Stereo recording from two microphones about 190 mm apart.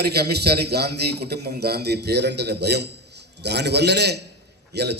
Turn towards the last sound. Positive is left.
turn(degrees=-60)  # may be behind; listen again after turning